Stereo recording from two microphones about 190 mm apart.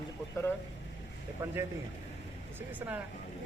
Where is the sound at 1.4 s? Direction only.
15° right (ahead or behind).